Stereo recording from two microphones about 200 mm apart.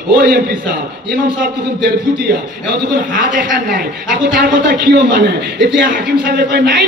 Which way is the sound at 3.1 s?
45° right (ahead or behind).